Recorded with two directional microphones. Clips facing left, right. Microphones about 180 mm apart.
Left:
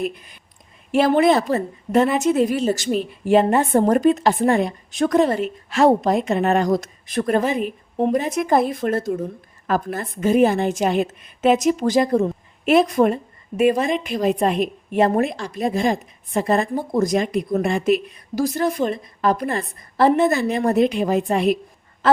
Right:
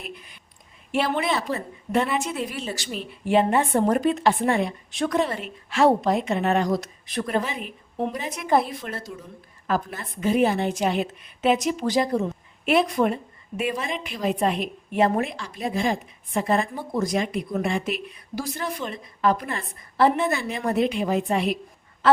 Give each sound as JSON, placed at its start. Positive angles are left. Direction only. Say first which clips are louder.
{"t": 0.9, "sound": "a woman's voice", "louder": "left 9 dB", "side_deg": 45}